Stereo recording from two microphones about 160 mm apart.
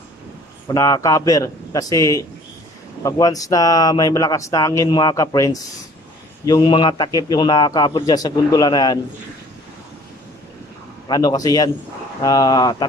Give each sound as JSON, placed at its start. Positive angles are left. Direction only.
{"t": 0.7, "sound": "speech", "side_deg": 20}
{"t": 11.1, "sound": "speech", "side_deg": 25}